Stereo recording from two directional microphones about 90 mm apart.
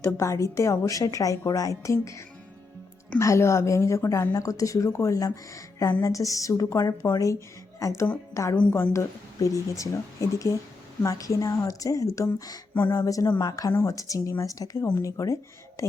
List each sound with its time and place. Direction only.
0.0 s a woman's voice: 35° left (ahead or behind)
4.4 s a woman's voice: 40° left (ahead or behind)
12.7 s speech: 20° left (ahead or behind)
13.0 s a woman's voice: 40° left (ahead or behind)